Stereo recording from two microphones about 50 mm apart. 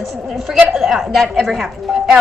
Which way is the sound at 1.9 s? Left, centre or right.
Centre.